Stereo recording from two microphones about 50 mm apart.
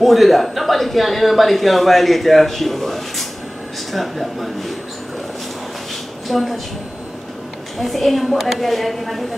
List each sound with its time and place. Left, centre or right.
0.0 s speech: centre
6.2 s speech: centre
7.8 s speech: centre